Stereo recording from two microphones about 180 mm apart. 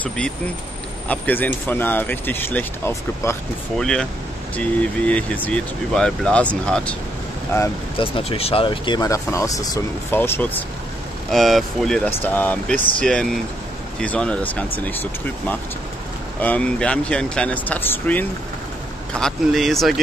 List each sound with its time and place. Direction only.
1.0 s speech: 10° left (ahead or behind)
3.7 s speech: 5° left (ahead or behind)
8.0 s speech: 35° left (ahead or behind); by 10.6 s 10° left (ahead or behind)
11.3 s speech: centre (ahead or behind)